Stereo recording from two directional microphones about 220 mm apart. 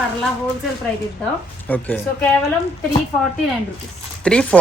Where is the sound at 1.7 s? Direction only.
5° left (ahead or behind).